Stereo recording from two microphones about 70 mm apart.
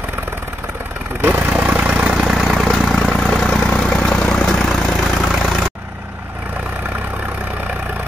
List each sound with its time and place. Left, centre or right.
1.2 s vehicle: right
2.0 s vehicle: centre